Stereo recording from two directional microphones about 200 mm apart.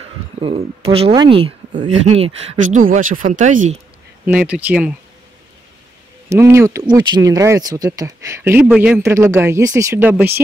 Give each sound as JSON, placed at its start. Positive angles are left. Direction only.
{"t": 0.4, "sound": "speech", "side_deg": -25}
{"t": 2.9, "sound": "speech", "side_deg": -40}
{"t": 4.3, "sound": "speech", "side_deg": -10}
{"t": 6.2, "sound": "speech", "side_deg": -15}